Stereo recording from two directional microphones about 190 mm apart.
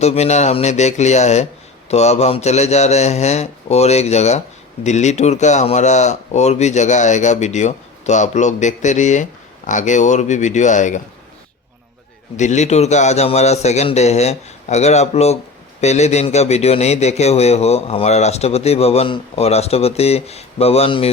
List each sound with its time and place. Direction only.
0.0 s a man's voice: 35° left (ahead or behind)
12.4 s a man's voice: 40° left (ahead or behind)